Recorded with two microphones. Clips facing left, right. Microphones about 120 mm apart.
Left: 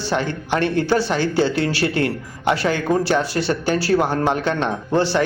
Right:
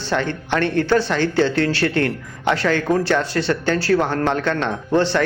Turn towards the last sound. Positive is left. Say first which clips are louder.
# right 1 dB
turn(degrees=10)  # may be behind; listen again after turning